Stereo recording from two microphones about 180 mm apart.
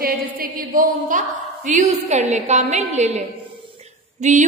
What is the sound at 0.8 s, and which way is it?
A woman's voice, 45° right (ahead or behind).